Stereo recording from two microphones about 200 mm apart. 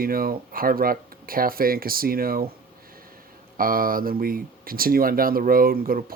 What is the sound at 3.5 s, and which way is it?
Speech, 45° right (ahead or behind).